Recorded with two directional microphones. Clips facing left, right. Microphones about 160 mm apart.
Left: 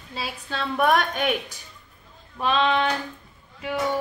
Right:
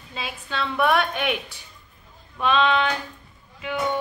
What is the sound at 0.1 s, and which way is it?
A woman's voice, 40° left (ahead or behind).